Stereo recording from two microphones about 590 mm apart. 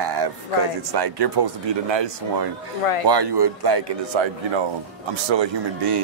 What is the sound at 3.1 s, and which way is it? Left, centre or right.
Speech, right.